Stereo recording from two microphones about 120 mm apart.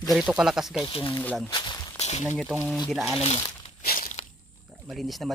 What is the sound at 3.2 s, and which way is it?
Crumpling, 55° left (ahead or behind).